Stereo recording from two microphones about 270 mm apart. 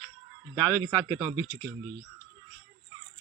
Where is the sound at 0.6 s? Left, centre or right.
Centre.